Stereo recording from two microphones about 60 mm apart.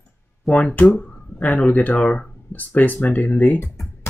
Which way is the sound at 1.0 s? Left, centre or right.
Left.